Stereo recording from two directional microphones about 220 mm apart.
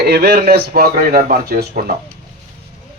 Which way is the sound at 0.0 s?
45° right (ahead or behind).